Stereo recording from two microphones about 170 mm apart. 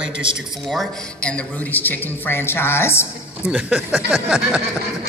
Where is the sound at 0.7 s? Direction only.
5° left (ahead or behind).